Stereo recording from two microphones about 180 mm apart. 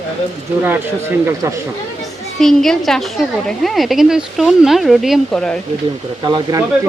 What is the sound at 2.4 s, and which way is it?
A woman's voice, centre (ahead or behind).